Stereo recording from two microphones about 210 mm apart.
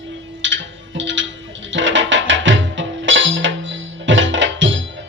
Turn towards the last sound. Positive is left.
turn(degrees=-60)  # may be behind; listen again after turning